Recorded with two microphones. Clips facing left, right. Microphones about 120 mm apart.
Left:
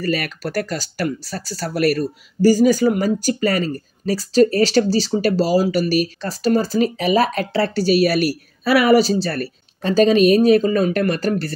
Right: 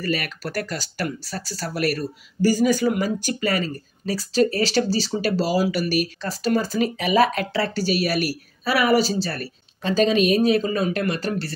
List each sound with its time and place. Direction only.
0.0 s speech: 40° left (ahead or behind)
8.6 s speech: 55° left (ahead or behind)
9.2 s speech: 40° left (ahead or behind)